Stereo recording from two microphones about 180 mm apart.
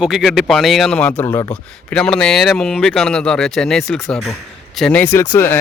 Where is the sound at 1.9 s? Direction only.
5° left (ahead or behind).